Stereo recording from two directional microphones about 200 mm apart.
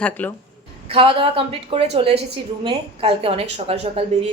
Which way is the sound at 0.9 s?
25° right (ahead or behind).